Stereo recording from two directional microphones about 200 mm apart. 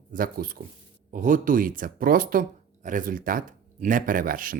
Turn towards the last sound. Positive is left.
turn(degrees=-45)  # may be behind; listen again after turning